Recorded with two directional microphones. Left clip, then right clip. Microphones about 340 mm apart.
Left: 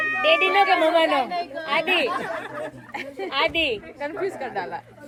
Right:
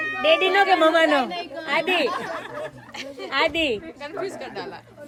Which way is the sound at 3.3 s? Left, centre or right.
Right.